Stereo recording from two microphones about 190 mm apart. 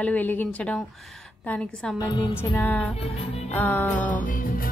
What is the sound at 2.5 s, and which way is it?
Speech, 10° left (ahead or behind).